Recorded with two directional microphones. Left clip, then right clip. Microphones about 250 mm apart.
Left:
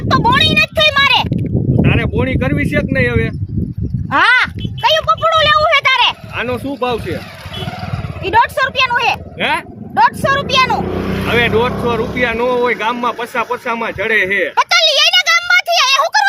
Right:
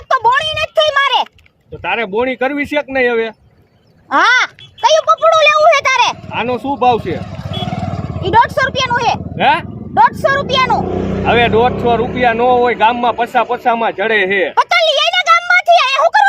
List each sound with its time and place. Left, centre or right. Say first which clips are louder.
0.1 s a sound: left 1 dB; left
1.8 s speech: right 3 dB; centre
4.1 s a sound: even; left
6.3 s speech: right 3 dB; centre
8.2 s speech: right 1 dB; left
9.4 s speech: right 6 dB; centre
9.9 s speech: right 1 dB; left
11.3 s speech: right 3 dB; centre
14.6 s a sound: left 1 dB; left